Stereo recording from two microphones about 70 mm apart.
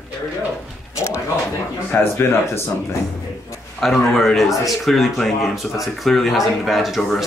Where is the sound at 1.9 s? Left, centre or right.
Left.